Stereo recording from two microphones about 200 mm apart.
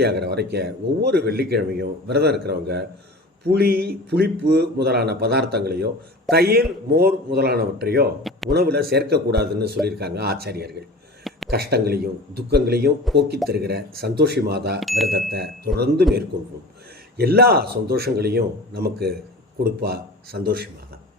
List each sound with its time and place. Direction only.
0.0 s speech: 55° right (ahead or behind)
11.2 s a sound: centre (ahead or behind)
11.5 s speech: 55° right (ahead or behind)
14.8 s speech: centre (ahead or behind)
15.3 s speech: 50° right (ahead or behind)
17.2 s speech: 50° right (ahead or behind)